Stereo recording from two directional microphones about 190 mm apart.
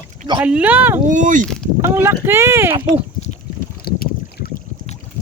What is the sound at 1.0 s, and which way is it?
Speech, 40° right (ahead or behind).